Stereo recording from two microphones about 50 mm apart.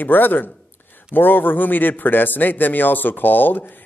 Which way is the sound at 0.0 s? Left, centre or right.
Left.